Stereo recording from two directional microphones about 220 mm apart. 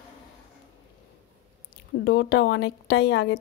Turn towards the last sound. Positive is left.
turn(degrees=50)  # may be behind; listen again after turning